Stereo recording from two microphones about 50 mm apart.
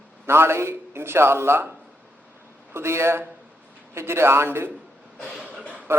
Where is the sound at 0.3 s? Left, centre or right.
Right.